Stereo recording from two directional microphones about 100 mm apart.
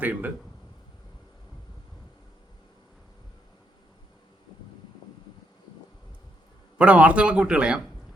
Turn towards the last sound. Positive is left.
turn(degrees=-10)  # may be behind; listen again after turning